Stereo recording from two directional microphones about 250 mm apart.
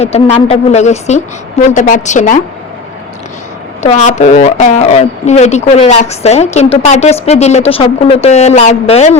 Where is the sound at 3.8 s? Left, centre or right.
Left.